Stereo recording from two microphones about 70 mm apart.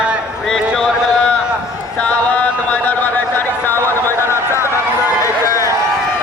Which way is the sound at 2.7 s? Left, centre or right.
Left.